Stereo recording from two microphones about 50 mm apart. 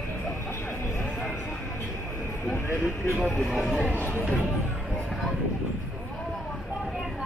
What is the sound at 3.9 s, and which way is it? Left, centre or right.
Speech, left.